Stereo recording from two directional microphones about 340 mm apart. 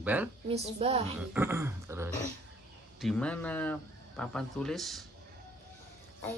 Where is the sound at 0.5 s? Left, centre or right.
Centre.